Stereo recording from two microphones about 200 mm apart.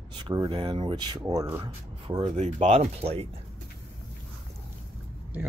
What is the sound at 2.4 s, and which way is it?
Speech, 30° right (ahead or behind).